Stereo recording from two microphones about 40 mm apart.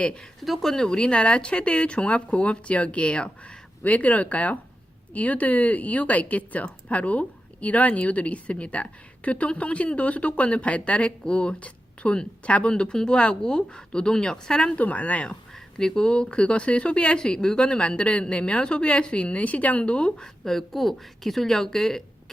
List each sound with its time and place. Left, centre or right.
0.4 s speech: centre
0.7 s a woman's voice: centre
14.8 s speech: left
15.8 s a woman's voice: centre
20.4 s speech: centre